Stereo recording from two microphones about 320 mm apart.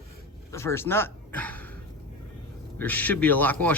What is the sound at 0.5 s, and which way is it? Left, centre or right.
Speech, centre.